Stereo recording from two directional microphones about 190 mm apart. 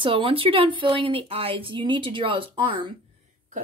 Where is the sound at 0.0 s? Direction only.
30° right (ahead or behind).